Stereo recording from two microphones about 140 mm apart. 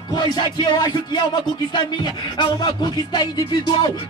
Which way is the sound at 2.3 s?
30° left (ahead or behind).